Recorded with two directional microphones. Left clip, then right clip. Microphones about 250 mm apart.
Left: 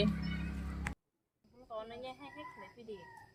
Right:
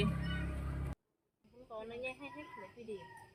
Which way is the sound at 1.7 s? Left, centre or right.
Centre.